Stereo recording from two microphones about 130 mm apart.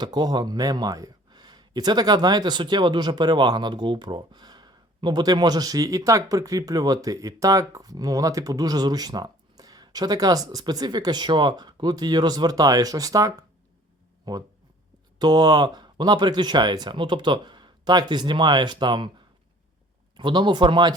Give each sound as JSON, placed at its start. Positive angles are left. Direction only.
{"t": 0.0, "sound": "speech", "side_deg": -30}
{"t": 20.1, "sound": "speech", "side_deg": -35}